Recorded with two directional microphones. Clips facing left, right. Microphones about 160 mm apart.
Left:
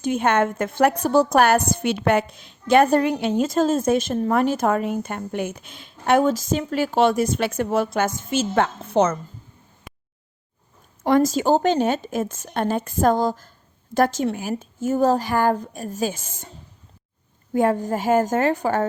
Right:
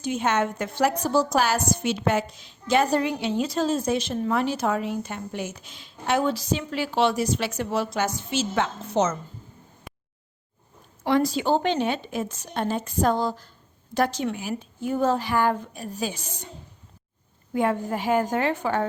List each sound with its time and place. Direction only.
0.0 s a woman's voice: 55° left (ahead or behind)
11.0 s a woman's voice: 45° left (ahead or behind)
17.5 s a woman's voice: 40° left (ahead or behind)